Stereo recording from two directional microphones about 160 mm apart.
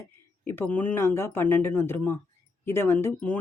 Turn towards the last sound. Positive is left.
turn(degrees=10)  # may be behind; listen again after turning